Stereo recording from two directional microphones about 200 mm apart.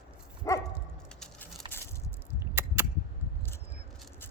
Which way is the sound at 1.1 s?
5° left (ahead or behind).